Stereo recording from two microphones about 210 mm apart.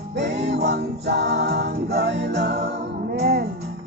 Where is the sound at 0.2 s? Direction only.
55° right (ahead or behind).